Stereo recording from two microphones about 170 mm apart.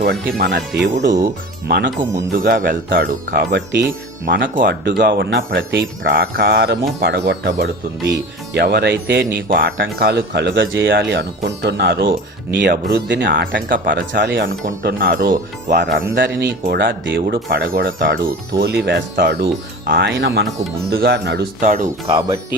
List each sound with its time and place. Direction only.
0.0 s speech: 70° right (ahead or behind)
1.6 s speech: 70° right (ahead or behind)
2.1 s speech: 60° right (ahead or behind); by 3.8 s 90° right
4.3 s speech: 55° right (ahead or behind); by 13.5 s 90° right
13.5 s speech: 55° right (ahead or behind)
14.2 s speech: 90° right
14.8 s speech: 65° right (ahead or behind); by 20.5 s 85° right
20.9 s speech: 70° right (ahead or behind)
21.6 s speech: 50° right (ahead or behind)